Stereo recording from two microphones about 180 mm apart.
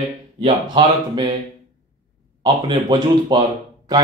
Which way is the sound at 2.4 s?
25° right (ahead or behind).